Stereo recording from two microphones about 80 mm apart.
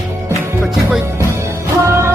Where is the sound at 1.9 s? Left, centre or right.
Right.